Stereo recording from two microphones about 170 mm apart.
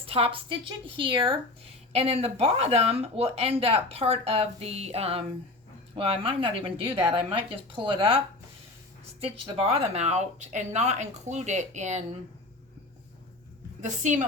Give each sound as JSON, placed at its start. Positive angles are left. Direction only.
{"t": 0.0, "sound": "speech", "side_deg": -35}
{"t": 9.2, "sound": "speech", "side_deg": -35}
{"t": 13.8, "sound": "speech", "side_deg": -45}